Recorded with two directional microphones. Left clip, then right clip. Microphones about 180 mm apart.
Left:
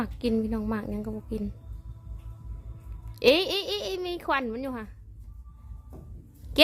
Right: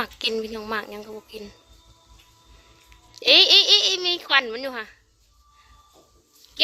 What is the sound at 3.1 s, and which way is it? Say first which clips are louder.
Speech: right 7 dB; 5° left (ahead or behind).